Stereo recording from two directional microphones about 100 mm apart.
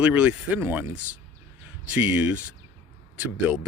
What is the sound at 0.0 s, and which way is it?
Speech, 15° right (ahead or behind).